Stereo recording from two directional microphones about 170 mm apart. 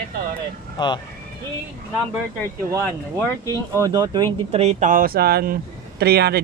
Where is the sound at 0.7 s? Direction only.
25° left (ahead or behind).